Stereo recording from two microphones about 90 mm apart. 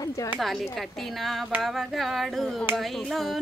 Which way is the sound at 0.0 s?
40° left (ahead or behind).